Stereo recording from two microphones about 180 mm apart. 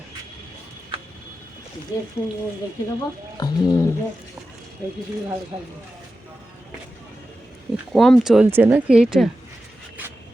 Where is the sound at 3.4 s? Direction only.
20° left (ahead or behind).